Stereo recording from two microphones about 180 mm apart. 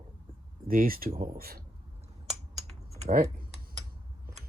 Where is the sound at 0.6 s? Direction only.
50° right (ahead or behind).